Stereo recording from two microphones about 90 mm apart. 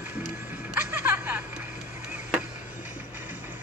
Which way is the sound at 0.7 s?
20° right (ahead or behind).